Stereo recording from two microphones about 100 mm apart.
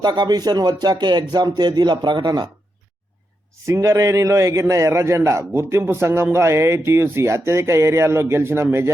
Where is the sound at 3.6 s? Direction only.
30° right (ahead or behind).